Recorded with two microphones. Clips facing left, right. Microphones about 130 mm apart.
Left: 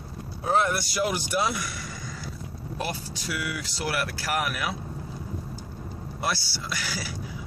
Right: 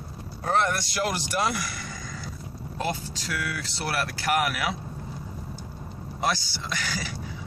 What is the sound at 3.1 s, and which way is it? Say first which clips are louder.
Speech: even; 15° left (ahead or behind).